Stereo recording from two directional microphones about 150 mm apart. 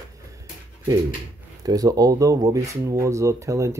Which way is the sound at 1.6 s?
25° right (ahead or behind).